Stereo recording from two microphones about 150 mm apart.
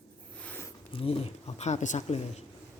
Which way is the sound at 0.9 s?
40° left (ahead or behind).